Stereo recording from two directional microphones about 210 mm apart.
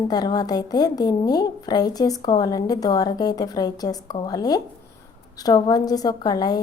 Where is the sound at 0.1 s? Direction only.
20° left (ahead or behind).